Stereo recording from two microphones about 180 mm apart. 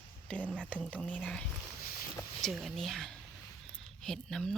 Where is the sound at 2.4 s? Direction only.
Centre (ahead or behind).